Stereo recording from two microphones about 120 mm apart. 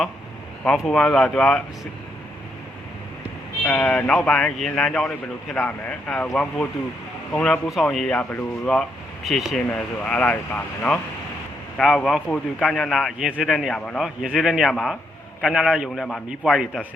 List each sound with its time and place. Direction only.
0.6 s speech: 5° left (ahead or behind)
3.7 s speech: 10° left (ahead or behind)
7.7 s speech: centre (ahead or behind)
9.2 s speech: centre (ahead or behind)
9.6 s speech: 10° left (ahead or behind)
14.0 s speech: 5° right (ahead or behind)